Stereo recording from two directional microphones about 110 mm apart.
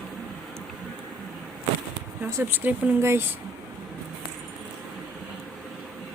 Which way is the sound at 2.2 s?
20° right (ahead or behind).